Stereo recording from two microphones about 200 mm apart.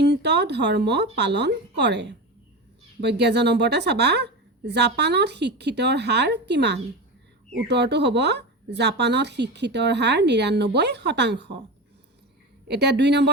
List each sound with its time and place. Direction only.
0.0 s speech: 55° right (ahead or behind)
12.6 s speech: 55° right (ahead or behind)